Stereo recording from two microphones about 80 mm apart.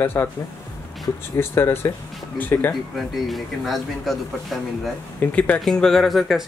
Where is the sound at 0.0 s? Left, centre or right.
Left.